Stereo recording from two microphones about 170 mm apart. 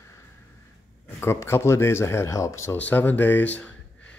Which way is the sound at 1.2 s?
15° left (ahead or behind).